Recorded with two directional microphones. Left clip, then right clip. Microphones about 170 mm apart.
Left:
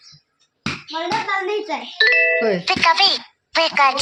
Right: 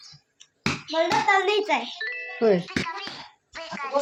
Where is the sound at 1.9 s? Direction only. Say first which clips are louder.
Left 18 dB; 65° left (ahead or behind).